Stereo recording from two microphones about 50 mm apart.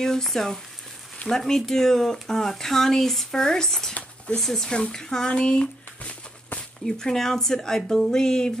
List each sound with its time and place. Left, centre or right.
0.0 s speech: centre; by 6.6 s left
6.9 s speech: centre